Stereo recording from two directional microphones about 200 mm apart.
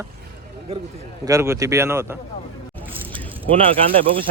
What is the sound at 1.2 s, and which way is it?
Speech, 15° right (ahead or behind).